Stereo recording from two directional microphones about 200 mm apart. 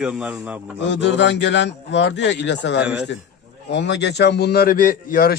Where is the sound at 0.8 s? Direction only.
65° left (ahead or behind); by 5.3 s 45° left (ahead or behind).